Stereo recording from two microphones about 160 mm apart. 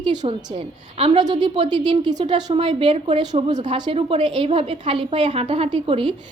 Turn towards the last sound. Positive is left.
turn(degrees=-35)  # may be behind; listen again after turning